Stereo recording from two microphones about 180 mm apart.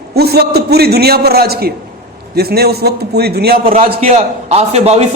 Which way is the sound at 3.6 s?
30° right (ahead or behind).